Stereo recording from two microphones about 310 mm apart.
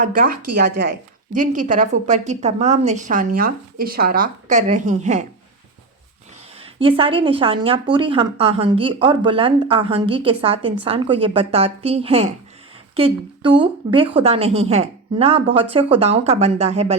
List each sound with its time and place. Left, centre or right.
0.0 s a woman's voice: right
6.6 s a woman's voice: centre